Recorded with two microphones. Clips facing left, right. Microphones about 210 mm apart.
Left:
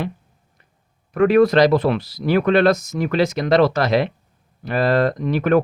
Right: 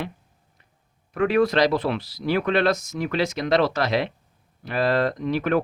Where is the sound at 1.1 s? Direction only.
50° left (ahead or behind).